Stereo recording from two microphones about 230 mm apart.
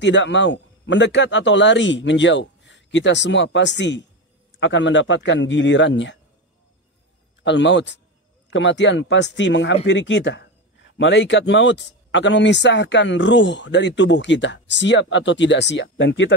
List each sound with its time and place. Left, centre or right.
0.0 s a man's voice: left
7.4 s a man's voice: left